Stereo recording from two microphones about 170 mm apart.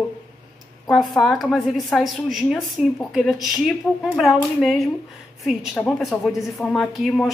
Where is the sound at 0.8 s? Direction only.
Centre (ahead or behind).